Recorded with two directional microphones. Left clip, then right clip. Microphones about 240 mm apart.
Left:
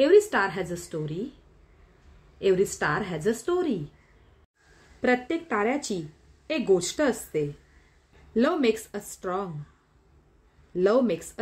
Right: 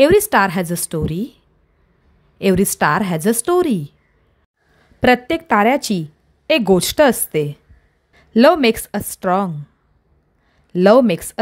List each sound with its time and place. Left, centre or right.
0.0 s a woman's voice: right
2.3 s a woman's voice: right
5.0 s a woman's voice: right
10.7 s a woman's voice: right